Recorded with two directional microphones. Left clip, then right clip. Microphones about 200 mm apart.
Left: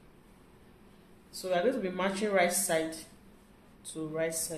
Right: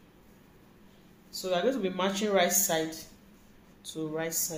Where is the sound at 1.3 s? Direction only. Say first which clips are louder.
Right 1 dB; 15° right (ahead or behind).